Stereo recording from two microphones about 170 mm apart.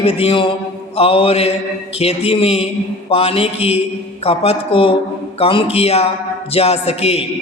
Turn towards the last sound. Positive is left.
turn(degrees=35)  # may be behind; listen again after turning